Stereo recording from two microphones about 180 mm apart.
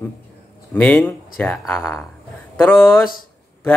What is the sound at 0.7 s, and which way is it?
Speech, 5° left (ahead or behind).